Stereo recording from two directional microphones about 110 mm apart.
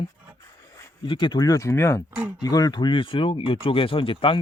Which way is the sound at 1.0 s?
45° left (ahead or behind).